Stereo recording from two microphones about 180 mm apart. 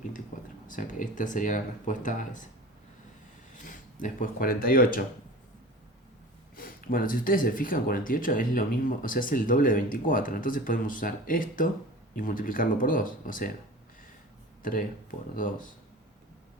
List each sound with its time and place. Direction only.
0.7 s speech: 45° left (ahead or behind)
3.6 s speech: 45° left (ahead or behind)
6.6 s speech: 50° left (ahead or behind)
14.6 s speech: 50° left (ahead or behind)